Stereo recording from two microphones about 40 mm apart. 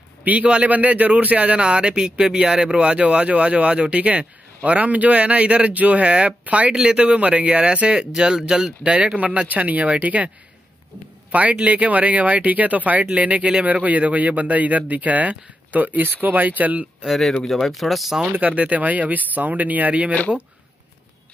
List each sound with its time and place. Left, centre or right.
0.2 s a man's voice: right
1.6 s speech: right
6.7 s speech: right
8.9 s speech: right
11.5 s speech: right
16.0 s speech: right
17.0 s speech: centre
18.4 s speech: right